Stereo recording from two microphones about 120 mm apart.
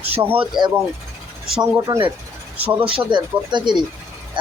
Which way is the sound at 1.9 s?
40° right (ahead or behind).